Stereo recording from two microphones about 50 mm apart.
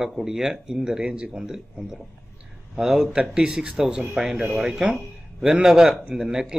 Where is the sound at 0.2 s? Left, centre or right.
Centre.